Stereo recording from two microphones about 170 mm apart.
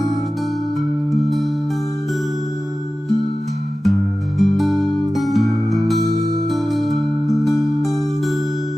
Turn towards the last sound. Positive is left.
turn(degrees=0)  # may be behind; listen again after turning